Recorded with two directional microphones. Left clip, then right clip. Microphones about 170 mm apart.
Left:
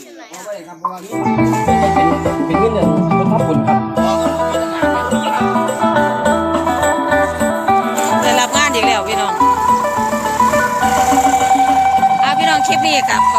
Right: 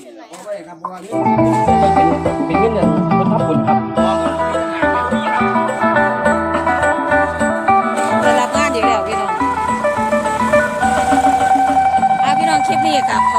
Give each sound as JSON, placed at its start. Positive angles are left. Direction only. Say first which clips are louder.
{"t": 1.2, "sound": "music", "louder": "right 2 dB", "side_deg": 10}
{"t": 2.5, "sound": "music", "louder": "left 1 dB", "side_deg": 35}
{"t": 7.1, "sound": "music", "louder": "even", "side_deg": 5}